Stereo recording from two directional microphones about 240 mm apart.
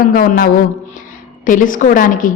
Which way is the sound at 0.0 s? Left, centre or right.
Left.